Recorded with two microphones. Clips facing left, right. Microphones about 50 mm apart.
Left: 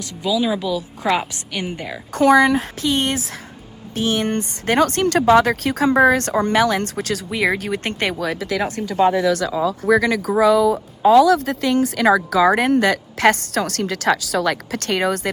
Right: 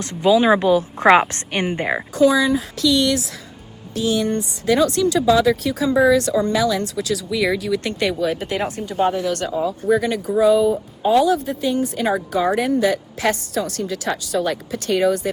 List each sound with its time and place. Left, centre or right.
0.0 s a woman's voice: right
2.1 s speech: left
2.8 s speech: left
5.0 s speech: left
7.3 s speech: left
8.2 s speech: left
9.5 s speech: left
10.2 s speech: left